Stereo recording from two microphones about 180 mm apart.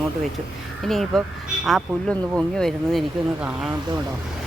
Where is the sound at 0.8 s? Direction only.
Centre (ahead or behind).